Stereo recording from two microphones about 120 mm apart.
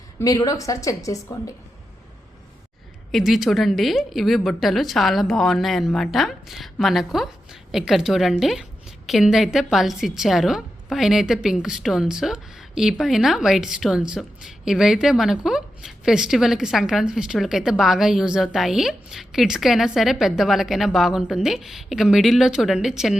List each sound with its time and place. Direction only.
0.2 s a woman's voice: 30° left (ahead or behind)
3.1 s a woman's voice: centre (ahead or behind)